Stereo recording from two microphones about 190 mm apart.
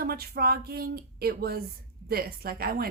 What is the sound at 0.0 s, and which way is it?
Speech, 50° right (ahead or behind).